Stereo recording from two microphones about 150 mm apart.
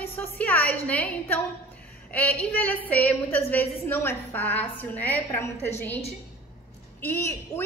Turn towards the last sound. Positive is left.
turn(degrees=15)  # may be behind; listen again after turning